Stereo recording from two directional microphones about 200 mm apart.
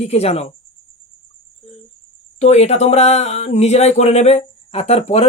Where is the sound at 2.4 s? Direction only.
35° left (ahead or behind).